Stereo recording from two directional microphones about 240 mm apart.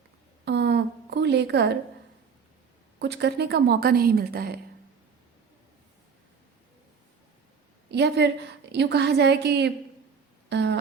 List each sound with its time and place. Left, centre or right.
0.4 s a sound: right
3.0 s a woman's voice: right
7.9 s a woman's voice: right